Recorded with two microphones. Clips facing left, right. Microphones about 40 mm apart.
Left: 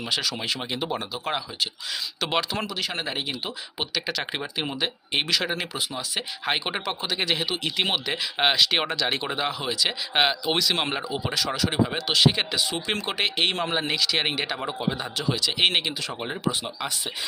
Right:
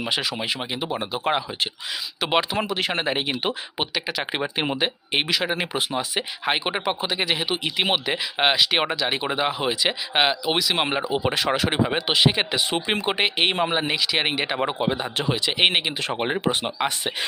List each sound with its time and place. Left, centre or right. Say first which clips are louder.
0.0 s speech: right 2 dB; right
0.3 s speech: right 2 dB; centre
1.1 s speech: right 5 dB; right
2.6 s speech: right 5 dB; right
3.8 s speech: right 2 dB; centre
4.5 s speech: right 3 dB; right
5.3 s speech: right 1 dB; centre
5.7 s speech: right 5 dB; right
6.1 s speech: even; centre
10.2 s speech: right 1 dB; centre
11.1 s speech: right 5 dB; right
14.6 s speech: right 5 dB; right
16.0 s speech: right 5 dB; right